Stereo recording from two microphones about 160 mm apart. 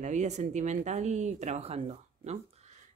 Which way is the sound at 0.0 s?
50° right (ahead or behind).